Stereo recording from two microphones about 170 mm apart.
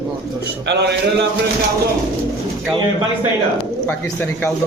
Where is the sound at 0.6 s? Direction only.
90° right.